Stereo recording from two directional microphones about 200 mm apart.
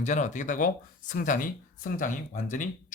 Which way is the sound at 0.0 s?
35° left (ahead or behind).